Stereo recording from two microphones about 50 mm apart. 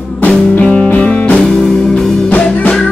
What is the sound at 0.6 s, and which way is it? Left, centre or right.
Music, left.